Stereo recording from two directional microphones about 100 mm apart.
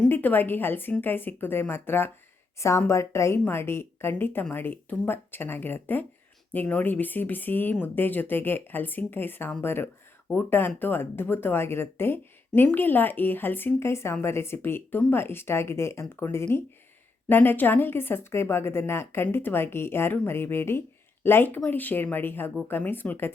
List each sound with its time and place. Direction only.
0.1 s speech: 20° left (ahead or behind)